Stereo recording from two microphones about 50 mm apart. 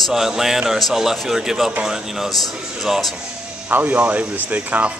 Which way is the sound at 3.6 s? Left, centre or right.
Right.